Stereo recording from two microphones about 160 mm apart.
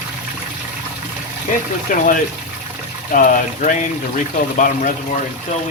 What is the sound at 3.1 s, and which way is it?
Speech, 55° left (ahead or behind).